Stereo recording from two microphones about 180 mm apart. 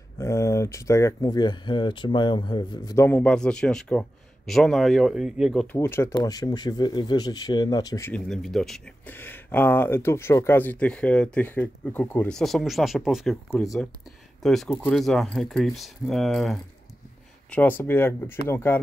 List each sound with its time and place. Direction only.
0.2 s speech: 15° left (ahead or behind)
5.8 s speech: 15° left (ahead or behind)
8.1 s speech: centre (ahead or behind)
14.4 s speech: centre (ahead or behind)